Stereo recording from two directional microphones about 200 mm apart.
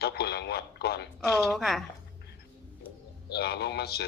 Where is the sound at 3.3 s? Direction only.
55° left (ahead or behind).